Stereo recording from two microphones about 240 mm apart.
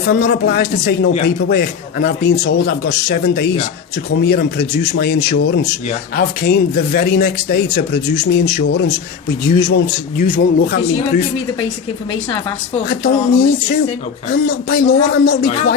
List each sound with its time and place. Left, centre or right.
0.0 s a man's voice: left
12.9 s a man's voice: left